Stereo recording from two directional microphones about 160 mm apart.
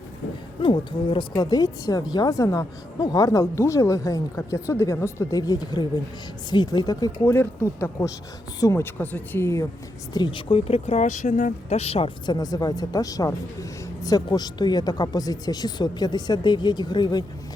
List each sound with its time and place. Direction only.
0.6 s speech: 30° left (ahead or behind); by 9.6 s 15° left (ahead or behind)
10.2 s speech: 30° left (ahead or behind)